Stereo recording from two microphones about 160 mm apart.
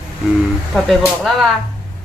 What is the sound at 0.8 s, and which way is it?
Speech, centre (ahead or behind).